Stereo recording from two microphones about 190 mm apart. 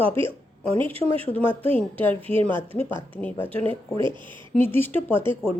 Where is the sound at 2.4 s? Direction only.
10° left (ahead or behind).